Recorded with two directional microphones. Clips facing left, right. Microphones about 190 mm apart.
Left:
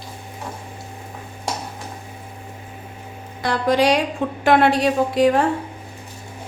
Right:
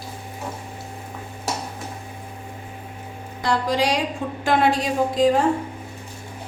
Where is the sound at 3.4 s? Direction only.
60° left (ahead or behind).